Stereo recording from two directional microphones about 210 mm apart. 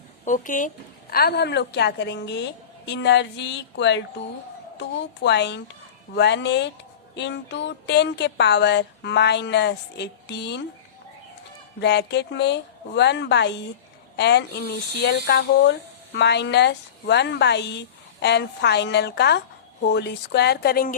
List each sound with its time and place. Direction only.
0.3 s speech: 40° left (ahead or behind)
1.1 s a woman's voice: 50° left (ahead or behind)
11.8 s a woman's voice: 50° left (ahead or behind)